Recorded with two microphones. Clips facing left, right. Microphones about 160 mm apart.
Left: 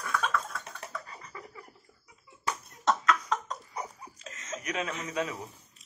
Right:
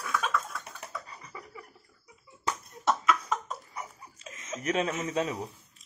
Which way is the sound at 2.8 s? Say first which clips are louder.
Even; 5° right (ahead or behind).